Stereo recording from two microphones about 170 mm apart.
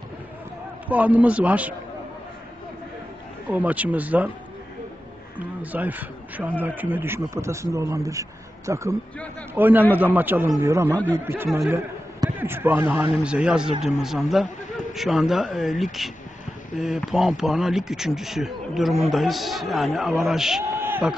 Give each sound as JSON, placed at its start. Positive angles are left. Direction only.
{"t": 0.8, "sound": "a man's voice", "side_deg": -10}
{"t": 3.4, "sound": "a man's voice", "side_deg": -10}
{"t": 5.6, "sound": "a man's voice", "side_deg": -10}